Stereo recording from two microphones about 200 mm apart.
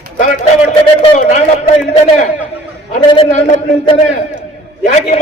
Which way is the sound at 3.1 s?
30° left (ahead or behind).